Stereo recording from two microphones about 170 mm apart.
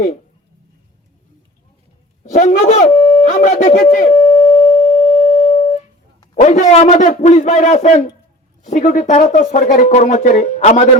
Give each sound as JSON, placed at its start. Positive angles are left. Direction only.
{"t": 2.2, "sound": "speech", "side_deg": 45}
{"t": 3.4, "sound": "busy signal", "side_deg": 45}
{"t": 6.3, "sound": "speech", "side_deg": 45}